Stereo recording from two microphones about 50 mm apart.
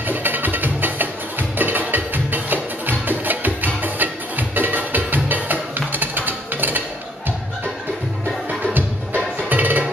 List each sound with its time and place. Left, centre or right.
0.0 s music: right
8.7 s music: right